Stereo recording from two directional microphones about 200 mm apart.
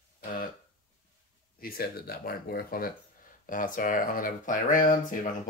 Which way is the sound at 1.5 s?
50° left (ahead or behind).